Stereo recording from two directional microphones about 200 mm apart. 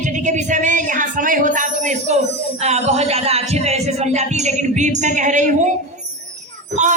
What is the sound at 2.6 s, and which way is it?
Speech, 30° right (ahead or behind).